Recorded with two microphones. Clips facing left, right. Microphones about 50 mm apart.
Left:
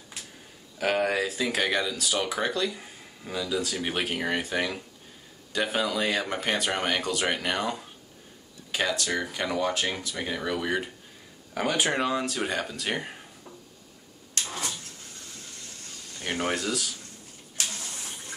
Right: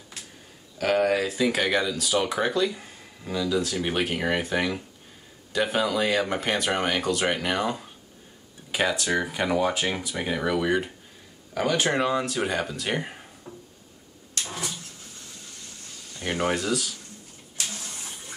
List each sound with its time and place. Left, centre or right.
0.7 s speech: centre
8.7 s speech: centre
11.5 s speech: centre
13.5 s a sound: right
16.2 s speech: centre